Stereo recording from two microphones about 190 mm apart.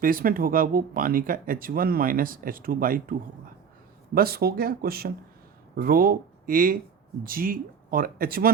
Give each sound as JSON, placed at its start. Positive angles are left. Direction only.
{"t": 0.0, "sound": "speech", "side_deg": -50}